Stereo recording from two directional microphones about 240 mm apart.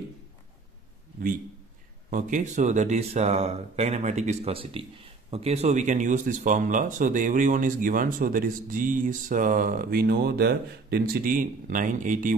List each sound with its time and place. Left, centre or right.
2.0 s speech: right